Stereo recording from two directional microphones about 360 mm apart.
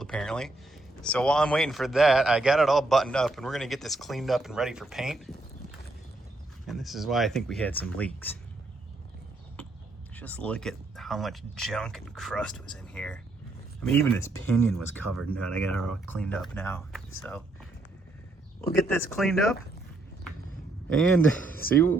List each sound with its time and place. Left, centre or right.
0.0 s speech: centre
6.7 s speech: centre
10.2 s speech: centre
18.6 s speech: left
18.9 s speech: centre
21.6 s speech: left